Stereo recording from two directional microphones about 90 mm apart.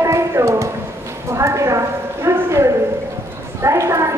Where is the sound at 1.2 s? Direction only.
35° right (ahead or behind).